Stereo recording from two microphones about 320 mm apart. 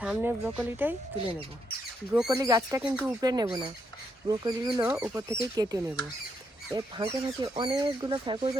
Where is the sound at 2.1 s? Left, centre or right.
Centre.